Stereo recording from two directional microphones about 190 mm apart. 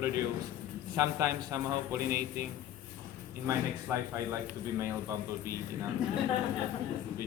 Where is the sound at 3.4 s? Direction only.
15° right (ahead or behind).